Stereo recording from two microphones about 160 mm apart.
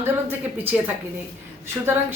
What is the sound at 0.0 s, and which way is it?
Speech, 15° right (ahead or behind).